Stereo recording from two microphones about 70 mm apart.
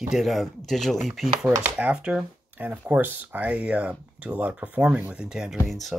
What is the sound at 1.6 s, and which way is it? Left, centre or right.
Speech, right.